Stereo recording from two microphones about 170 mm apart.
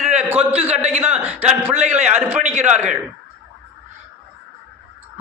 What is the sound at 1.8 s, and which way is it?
Speech, 40° right (ahead or behind).